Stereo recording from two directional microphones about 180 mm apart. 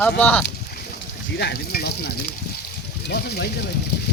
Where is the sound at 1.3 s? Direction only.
65° left (ahead or behind).